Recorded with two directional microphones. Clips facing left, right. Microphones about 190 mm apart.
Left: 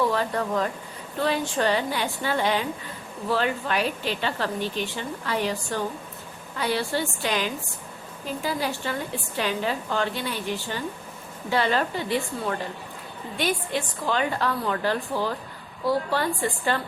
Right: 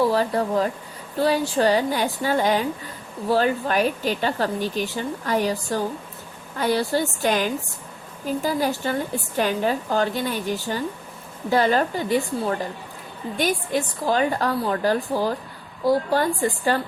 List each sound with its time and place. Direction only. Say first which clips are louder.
0.0 s a woman's voice: right 4 dB; 35° right (ahead or behind)